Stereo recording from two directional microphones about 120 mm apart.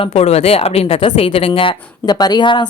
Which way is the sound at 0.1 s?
60° left (ahead or behind).